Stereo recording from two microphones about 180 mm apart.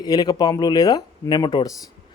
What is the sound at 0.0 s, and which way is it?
Speech, 20° left (ahead or behind).